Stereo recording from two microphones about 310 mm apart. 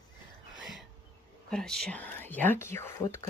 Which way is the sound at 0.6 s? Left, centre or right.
Centre.